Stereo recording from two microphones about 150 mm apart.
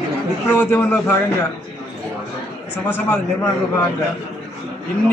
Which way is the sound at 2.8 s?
15° left (ahead or behind).